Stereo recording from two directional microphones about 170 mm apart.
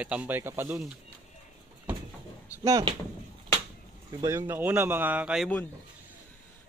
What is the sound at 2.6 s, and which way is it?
Speech, 20° right (ahead or behind).